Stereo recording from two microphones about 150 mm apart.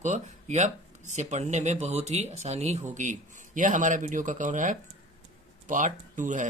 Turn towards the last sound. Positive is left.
turn(degrees=-55)  # may be behind; listen again after turning